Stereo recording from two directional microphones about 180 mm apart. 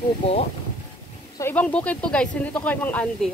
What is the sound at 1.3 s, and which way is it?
Speech, 10° left (ahead or behind).